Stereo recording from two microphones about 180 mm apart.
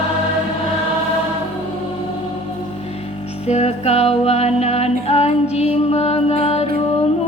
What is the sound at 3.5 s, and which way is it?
Music, 35° left (ahead or behind).